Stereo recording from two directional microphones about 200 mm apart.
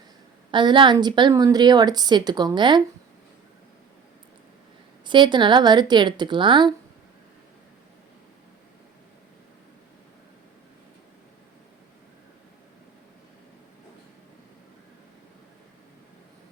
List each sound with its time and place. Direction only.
0.5 s a woman's voice: 25° right (ahead or behind)
5.0 s a woman's voice: 25° right (ahead or behind)